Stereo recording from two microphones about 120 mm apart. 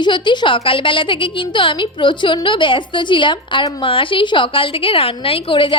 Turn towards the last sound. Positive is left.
turn(degrees=45)  # may be behind; listen again after turning